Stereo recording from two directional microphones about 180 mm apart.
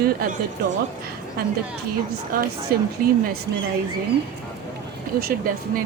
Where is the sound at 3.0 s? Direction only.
55° right (ahead or behind).